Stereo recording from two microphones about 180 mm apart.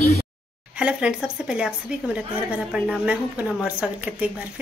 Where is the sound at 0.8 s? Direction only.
5° right (ahead or behind).